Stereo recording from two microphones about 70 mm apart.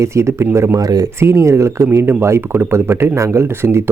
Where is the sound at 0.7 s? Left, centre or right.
Right.